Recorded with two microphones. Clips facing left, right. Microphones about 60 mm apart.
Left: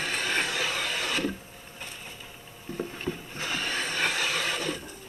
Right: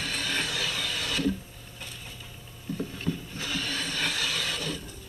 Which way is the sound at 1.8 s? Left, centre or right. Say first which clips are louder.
Left 1 dB; left.